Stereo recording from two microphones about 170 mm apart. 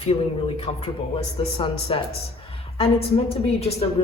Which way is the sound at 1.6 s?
30° left (ahead or behind).